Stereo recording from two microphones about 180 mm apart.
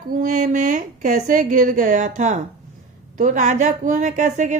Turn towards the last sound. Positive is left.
turn(degrees=-45)  # may be behind; listen again after turning